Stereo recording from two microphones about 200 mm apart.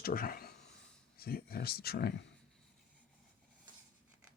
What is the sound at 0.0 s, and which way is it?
Speech, 45° left (ahead or behind).